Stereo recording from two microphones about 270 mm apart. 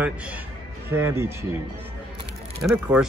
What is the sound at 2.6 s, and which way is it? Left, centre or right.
Speech, centre.